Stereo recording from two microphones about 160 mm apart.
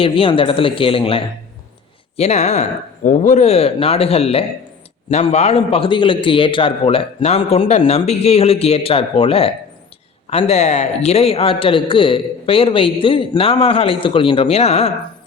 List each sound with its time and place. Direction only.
0.0 s a man's voice: 35° left (ahead or behind)